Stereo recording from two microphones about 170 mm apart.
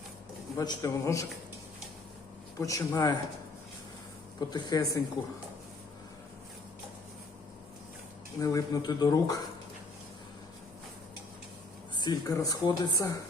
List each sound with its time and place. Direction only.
0.5 s speech: 20° left (ahead or behind)
2.6 s speech: 20° left (ahead or behind)
4.4 s speech: 25° left (ahead or behind)
8.4 s speech: 20° left (ahead or behind)
11.9 s speech: 20° left (ahead or behind)